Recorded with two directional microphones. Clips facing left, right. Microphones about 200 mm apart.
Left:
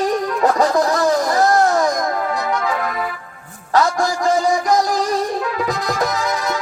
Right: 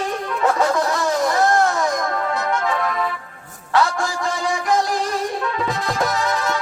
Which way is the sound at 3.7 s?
40° left (ahead or behind).